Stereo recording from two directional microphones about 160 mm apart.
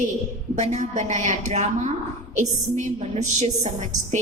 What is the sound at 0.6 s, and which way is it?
A woman's voice, 45° right (ahead or behind).